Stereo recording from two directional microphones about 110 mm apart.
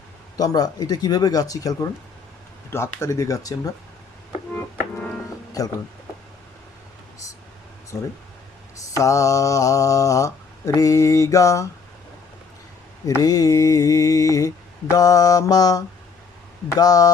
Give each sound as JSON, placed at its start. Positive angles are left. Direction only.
{"t": 0.3, "sound": "mantra", "side_deg": 35}
{"t": 4.5, "sound": "music", "side_deg": 10}
{"t": 5.6, "sound": "mantra", "side_deg": 35}
{"t": 8.9, "sound": "mantra", "side_deg": 30}
{"t": 13.1, "sound": "mantra", "side_deg": 35}